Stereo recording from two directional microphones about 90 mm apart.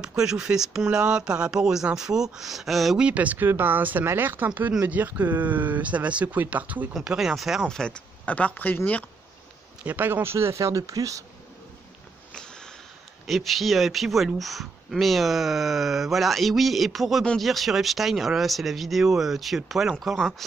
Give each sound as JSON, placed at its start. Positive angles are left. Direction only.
{"t": 0.0, "sound": "speech", "side_deg": -5}
{"t": 3.1, "sound": "speech", "side_deg": -15}
{"t": 6.9, "sound": "speech", "side_deg": -5}
{"t": 9.8, "sound": "speech", "side_deg": -20}
{"t": 12.4, "sound": "a sound", "side_deg": 10}
{"t": 13.3, "sound": "speech", "side_deg": 0}